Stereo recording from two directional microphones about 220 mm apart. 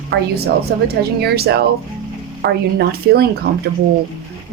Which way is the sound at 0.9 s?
45° right (ahead or behind).